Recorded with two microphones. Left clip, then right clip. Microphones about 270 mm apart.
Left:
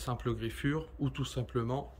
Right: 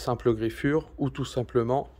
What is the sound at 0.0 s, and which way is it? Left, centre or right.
Speech, centre.